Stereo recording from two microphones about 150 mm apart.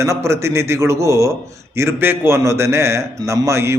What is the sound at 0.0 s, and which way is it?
A man's voice, 20° right (ahead or behind).